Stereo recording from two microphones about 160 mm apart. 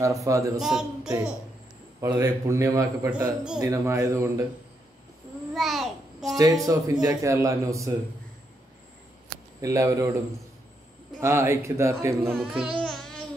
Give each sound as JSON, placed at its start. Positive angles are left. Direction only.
{"t": 0.0, "sound": "a man's voice", "side_deg": -20}
{"t": 0.6, "sound": "speech", "side_deg": -5}
{"t": 2.0, "sound": "a man's voice", "side_deg": -20}
{"t": 5.5, "sound": "a sound", "side_deg": 0}
{"t": 6.3, "sound": "a man's voice", "side_deg": -20}
{"t": 9.6, "sound": "a man's voice", "side_deg": -20}
{"t": 11.1, "sound": "speech", "side_deg": -15}
{"t": 12.4, "sound": "speech", "side_deg": -5}
{"t": 12.7, "sound": "babbling", "side_deg": 5}